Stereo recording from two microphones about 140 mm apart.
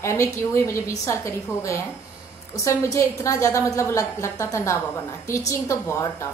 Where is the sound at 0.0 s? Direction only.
20° left (ahead or behind).